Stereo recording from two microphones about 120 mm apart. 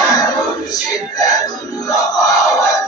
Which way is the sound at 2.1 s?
30° left (ahead or behind).